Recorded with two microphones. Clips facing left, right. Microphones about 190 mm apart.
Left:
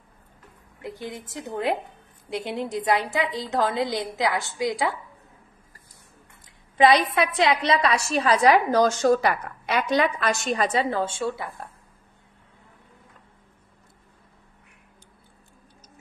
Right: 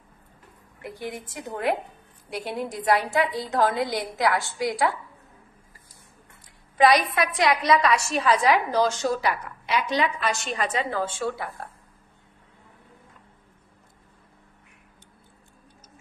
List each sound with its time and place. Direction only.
1.2 s a woman's voice: 20° left (ahead or behind)
6.8 s a woman's voice: 25° left (ahead or behind)